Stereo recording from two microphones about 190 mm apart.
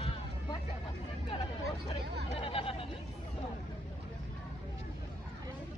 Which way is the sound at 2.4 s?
30° left (ahead or behind).